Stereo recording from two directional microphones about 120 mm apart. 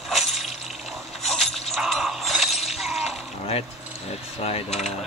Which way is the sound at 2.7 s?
Centre (ahead or behind).